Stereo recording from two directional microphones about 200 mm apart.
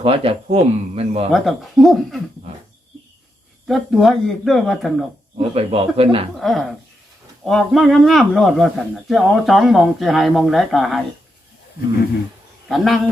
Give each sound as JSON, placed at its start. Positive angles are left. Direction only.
{"t": 0.0, "sound": "speech", "side_deg": -30}
{"t": 1.3, "sound": "speech", "side_deg": 0}
{"t": 3.7, "sound": "speech", "side_deg": 0}
{"t": 5.4, "sound": "speech", "side_deg": -30}
{"t": 6.3, "sound": "speech", "side_deg": 0}
{"t": 12.6, "sound": "speech", "side_deg": 0}